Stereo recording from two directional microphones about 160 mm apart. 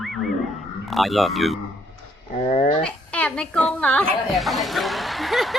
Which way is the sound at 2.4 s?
40° left (ahead or behind).